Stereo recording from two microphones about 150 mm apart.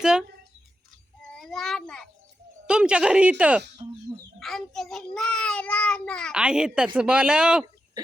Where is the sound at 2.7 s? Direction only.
5° right (ahead or behind).